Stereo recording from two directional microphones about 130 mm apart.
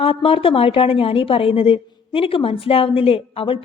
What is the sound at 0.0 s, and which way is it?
A woman's voice, 45° left (ahead or behind).